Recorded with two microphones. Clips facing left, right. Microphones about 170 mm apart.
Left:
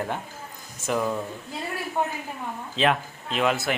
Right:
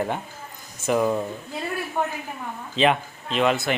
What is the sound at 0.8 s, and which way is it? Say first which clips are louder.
Speech: right 4 dB; 5° right (ahead or behind).